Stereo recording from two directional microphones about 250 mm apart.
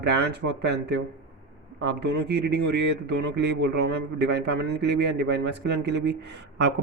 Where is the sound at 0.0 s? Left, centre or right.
Right.